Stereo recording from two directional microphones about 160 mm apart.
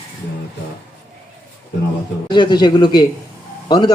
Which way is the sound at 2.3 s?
30° left (ahead or behind).